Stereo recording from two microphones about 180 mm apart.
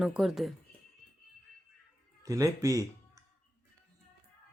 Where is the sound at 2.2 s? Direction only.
20° right (ahead or behind).